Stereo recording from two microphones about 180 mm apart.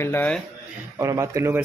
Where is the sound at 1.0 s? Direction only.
15° right (ahead or behind).